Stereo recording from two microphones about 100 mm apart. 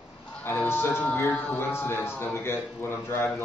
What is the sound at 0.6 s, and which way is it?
A man's voice, 25° left (ahead or behind).